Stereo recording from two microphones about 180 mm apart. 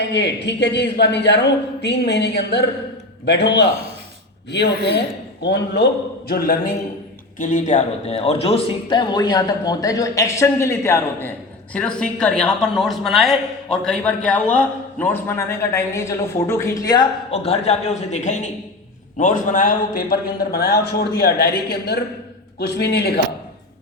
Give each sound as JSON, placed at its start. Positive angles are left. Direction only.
{"t": 0.1, "sound": "a man's voice", "side_deg": 70}
{"t": 5.4, "sound": "a man's voice", "side_deg": 70}
{"t": 17.3, "sound": "a man's voice", "side_deg": 35}